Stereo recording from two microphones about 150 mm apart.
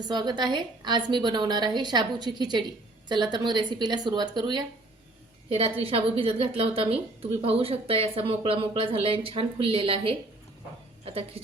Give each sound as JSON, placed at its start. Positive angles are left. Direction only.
{"t": 0.1, "sound": "a woman's voice", "side_deg": -30}
{"t": 5.5, "sound": "a woman's voice", "side_deg": -40}